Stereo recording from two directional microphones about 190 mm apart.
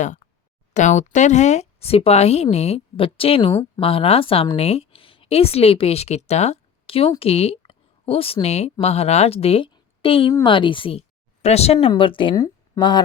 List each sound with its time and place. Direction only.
0.7 s speech: 40° left (ahead or behind); by 13.0 s 20° left (ahead or behind)